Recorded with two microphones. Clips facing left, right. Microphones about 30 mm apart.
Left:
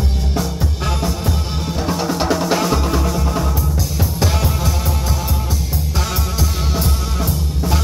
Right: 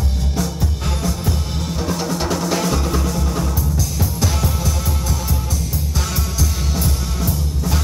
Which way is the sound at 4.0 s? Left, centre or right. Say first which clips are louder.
Left 4 dB; left.